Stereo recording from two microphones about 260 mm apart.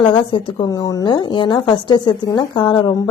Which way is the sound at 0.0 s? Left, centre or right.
Centre.